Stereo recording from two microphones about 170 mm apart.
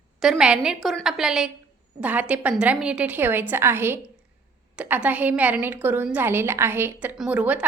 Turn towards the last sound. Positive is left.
turn(degrees=-10)  # may be behind; listen again after turning